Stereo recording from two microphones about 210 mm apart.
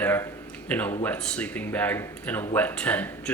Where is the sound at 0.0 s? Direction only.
10° left (ahead or behind).